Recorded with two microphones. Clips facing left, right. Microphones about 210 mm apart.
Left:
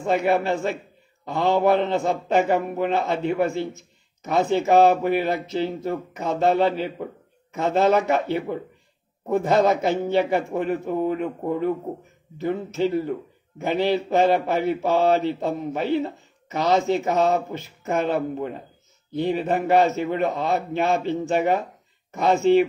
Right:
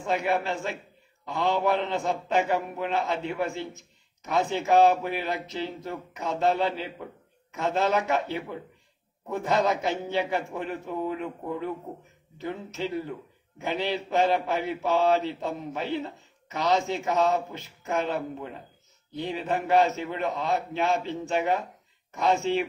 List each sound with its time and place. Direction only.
0.0 s a man's voice: 50° left (ahead or behind)
22.1 s speech: 55° left (ahead or behind)